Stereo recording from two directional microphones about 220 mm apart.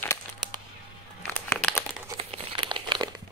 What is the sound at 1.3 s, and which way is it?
Crumpling, 10° left (ahead or behind).